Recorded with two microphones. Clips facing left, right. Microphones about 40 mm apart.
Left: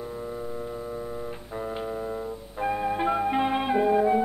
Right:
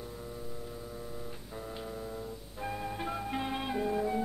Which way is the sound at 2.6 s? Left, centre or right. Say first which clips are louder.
Left 11 dB; left.